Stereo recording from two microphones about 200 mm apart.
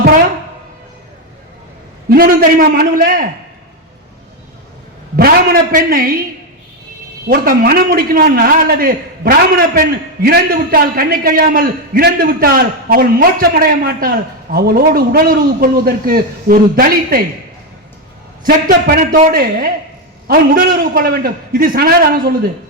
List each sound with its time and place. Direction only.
2.0 s a man's voice: 45° right (ahead or behind)
5.1 s a man's voice: 50° right (ahead or behind)
7.3 s a man's voice: 45° right (ahead or behind)
18.4 s a man's voice: 40° right (ahead or behind)